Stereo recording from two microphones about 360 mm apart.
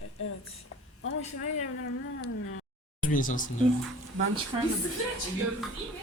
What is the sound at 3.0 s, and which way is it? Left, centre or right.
Speech, left.